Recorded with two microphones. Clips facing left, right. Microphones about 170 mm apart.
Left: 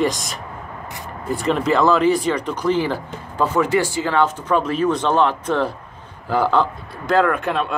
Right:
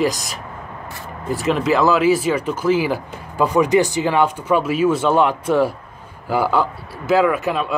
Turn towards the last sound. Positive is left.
turn(degrees=-5)  # may be behind; listen again after turning